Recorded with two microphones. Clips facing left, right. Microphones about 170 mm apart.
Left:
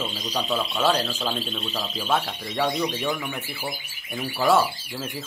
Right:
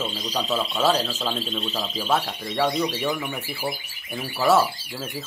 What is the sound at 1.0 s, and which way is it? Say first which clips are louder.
Speech: even; 10° left (ahead or behind).